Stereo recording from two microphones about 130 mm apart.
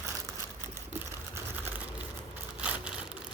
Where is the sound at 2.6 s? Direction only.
10° right (ahead or behind).